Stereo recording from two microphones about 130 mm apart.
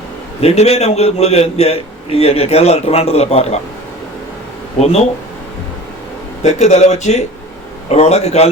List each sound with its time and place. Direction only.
0.4 s a man's voice: 55° left (ahead or behind)
4.8 s speech: 55° left (ahead or behind)
6.4 s speech: 60° left (ahead or behind)